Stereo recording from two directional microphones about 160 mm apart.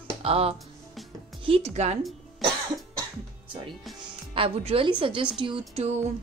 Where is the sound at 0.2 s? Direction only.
35° right (ahead or behind).